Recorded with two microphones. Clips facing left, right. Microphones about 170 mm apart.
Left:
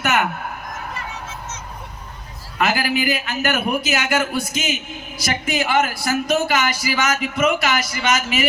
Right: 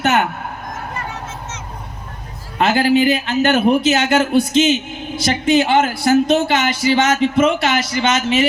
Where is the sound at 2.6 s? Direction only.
25° right (ahead or behind).